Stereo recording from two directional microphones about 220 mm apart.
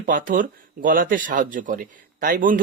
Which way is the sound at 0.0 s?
35° right (ahead or behind).